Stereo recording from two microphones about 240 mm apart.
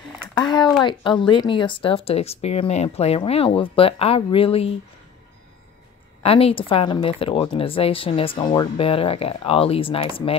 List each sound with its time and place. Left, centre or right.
0.3 s speech: centre
6.2 s speech: left